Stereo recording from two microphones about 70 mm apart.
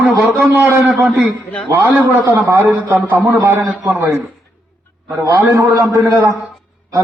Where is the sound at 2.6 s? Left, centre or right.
Right.